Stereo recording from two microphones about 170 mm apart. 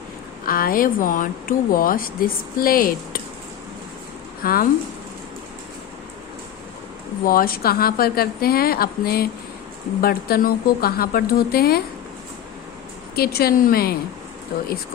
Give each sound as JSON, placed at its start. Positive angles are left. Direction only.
{"t": 0.4, "sound": "speech", "side_deg": 55}
{"t": 4.4, "sound": "speech", "side_deg": 60}
{"t": 7.3, "sound": "speech", "side_deg": 60}
{"t": 13.1, "sound": "speech", "side_deg": 65}